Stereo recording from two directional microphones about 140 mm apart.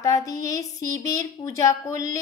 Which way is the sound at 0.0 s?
25° left (ahead or behind).